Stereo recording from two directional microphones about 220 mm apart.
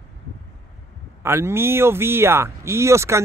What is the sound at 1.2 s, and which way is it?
Speech, 10° right (ahead or behind).